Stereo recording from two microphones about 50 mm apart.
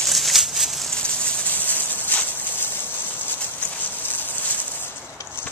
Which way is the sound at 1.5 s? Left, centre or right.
Left.